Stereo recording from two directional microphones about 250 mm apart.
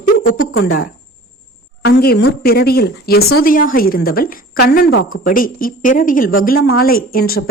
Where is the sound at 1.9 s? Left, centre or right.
Left.